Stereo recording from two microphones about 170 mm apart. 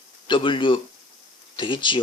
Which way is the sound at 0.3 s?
30° left (ahead or behind).